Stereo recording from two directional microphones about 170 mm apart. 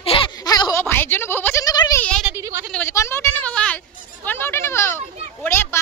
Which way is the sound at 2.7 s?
15° left (ahead or behind).